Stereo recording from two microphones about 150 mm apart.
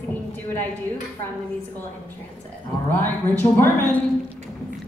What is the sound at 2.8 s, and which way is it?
Speech, 15° left (ahead or behind).